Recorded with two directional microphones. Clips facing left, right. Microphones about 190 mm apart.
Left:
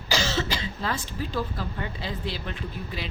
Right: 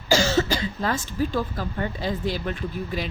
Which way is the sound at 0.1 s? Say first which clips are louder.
Right 6 dB; 45° right (ahead or behind).